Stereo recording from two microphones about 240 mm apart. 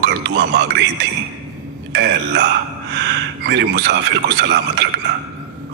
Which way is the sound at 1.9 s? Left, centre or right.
Right.